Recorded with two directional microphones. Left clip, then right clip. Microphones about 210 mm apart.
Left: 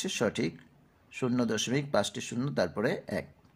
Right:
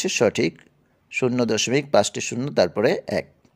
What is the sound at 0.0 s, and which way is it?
Speech, 35° right (ahead or behind).